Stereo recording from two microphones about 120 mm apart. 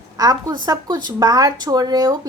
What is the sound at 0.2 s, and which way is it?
Speech, 30° right (ahead or behind).